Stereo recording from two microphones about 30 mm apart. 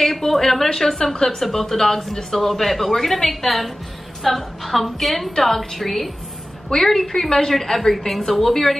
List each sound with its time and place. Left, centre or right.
0.0 s a sound: centre
0.7 s a woman's voice: centre
7.1 s a woman's voice: left